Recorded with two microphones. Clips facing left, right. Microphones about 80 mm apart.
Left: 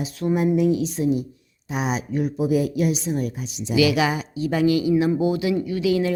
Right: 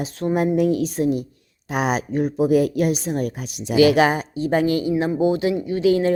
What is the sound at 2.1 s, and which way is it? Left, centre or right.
Speech, right.